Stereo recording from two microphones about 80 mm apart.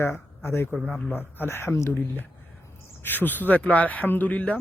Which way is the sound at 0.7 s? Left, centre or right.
Centre.